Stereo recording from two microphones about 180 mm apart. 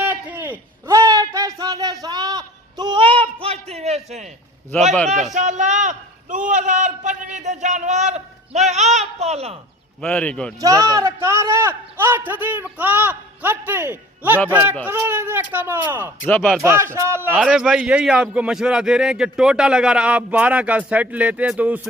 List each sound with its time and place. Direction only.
0.0 s a sound: 10° right (ahead or behind); by 4.3 s 40° right (ahead or behind)
4.9 s a man's voice: centre (ahead or behind)
5.3 s a man's voice: 45° right (ahead or behind)
10.0 s a man's voice: 5° left (ahead or behind)
10.6 s a man's voice: 20° right (ahead or behind)
16.2 s a man's voice: 5° left (ahead or behind)
16.6 s a man's voice: 15° right (ahead or behind)